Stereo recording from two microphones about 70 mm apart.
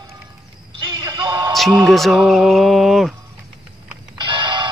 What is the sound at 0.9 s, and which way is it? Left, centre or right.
Music, right.